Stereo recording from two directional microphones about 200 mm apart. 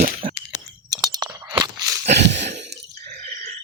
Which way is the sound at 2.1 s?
60° right (ahead or behind).